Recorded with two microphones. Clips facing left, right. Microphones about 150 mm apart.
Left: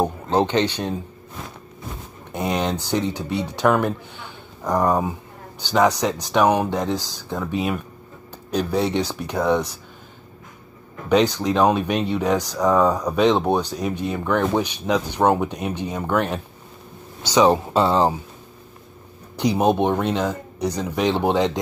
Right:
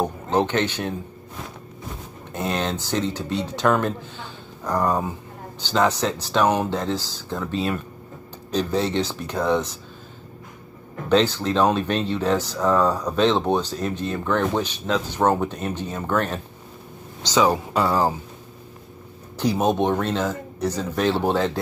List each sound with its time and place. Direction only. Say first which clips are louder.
0.0 s speech: left 2 dB; 15° left (ahead or behind)
2.3 s speech: left 2 dB; 15° left (ahead or behind)
11.1 s speech: left 1 dB; 15° left (ahead or behind)
17.5 s speech: left 3 dB; 25° left (ahead or behind)
19.3 s speech: left 2 dB; 15° left (ahead or behind)